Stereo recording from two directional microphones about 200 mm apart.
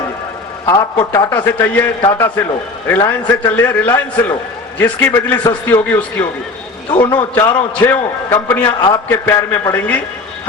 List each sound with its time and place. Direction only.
0.6 s a man's voice: 15° left (ahead or behind)
7.0 s a man's voice: 25° left (ahead or behind)
7.3 s a man's voice: 15° left (ahead or behind)